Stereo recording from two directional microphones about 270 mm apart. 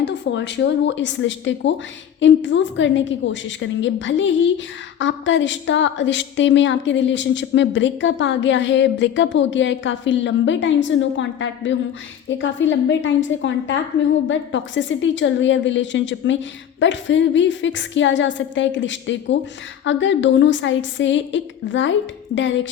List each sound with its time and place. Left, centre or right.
0.0 s a woman's voice: left